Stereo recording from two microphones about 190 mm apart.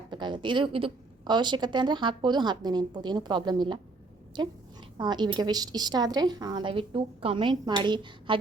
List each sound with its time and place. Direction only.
0.1 s a woman's voice: 25° right (ahead or behind)